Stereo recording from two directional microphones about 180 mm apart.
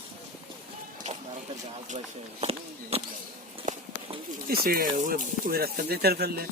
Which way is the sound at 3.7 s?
45° right (ahead or behind).